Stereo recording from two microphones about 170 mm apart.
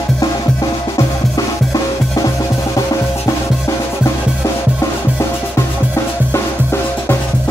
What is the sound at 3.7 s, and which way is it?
Music, 20° left (ahead or behind).